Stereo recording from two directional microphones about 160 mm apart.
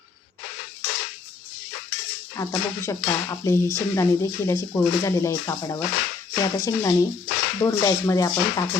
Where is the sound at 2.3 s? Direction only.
20° left (ahead or behind).